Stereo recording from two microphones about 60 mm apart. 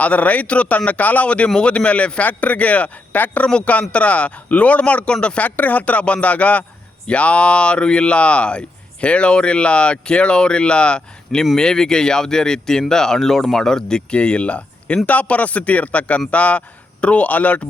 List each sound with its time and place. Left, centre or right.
0.0 s speech: left